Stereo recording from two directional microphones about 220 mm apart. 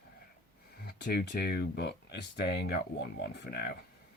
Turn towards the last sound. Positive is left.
turn(degrees=45)  # may be behind; listen again after turning